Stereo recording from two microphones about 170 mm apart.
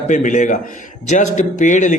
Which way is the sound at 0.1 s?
45° left (ahead or behind).